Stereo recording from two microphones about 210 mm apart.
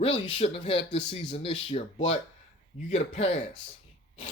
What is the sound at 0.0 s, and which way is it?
Speech, 30° left (ahead or behind).